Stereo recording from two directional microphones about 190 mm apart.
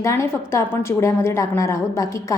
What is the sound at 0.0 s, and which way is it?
A woman's voice, 15° left (ahead or behind).